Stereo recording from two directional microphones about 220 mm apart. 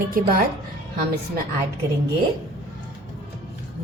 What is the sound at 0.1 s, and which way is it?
Speech, 40° right (ahead or behind).